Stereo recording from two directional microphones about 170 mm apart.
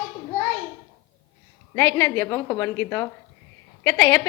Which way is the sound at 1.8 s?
15° left (ahead or behind).